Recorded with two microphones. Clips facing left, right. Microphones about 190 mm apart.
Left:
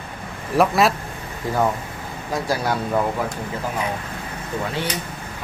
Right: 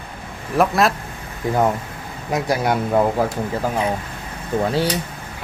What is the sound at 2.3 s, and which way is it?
Speech, 20° right (ahead or behind).